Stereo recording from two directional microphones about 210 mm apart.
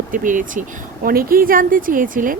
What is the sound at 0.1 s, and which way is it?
A woman's voice, 40° right (ahead or behind).